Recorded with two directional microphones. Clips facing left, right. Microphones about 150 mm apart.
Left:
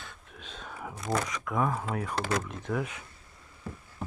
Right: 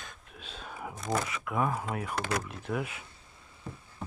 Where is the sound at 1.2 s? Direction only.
5° right (ahead or behind).